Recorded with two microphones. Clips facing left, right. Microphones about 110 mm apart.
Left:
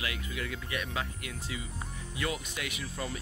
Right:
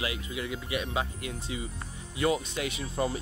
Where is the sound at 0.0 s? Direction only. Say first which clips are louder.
Right 3 dB; 20° right (ahead or behind).